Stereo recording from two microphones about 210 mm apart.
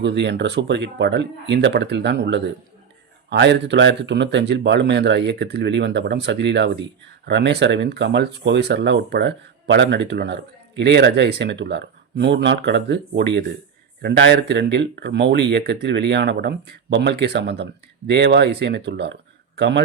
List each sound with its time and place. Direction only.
0.0 s a man's voice: 55° right (ahead or behind)